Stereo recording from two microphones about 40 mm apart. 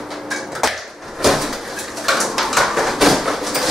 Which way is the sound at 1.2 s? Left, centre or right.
Centre.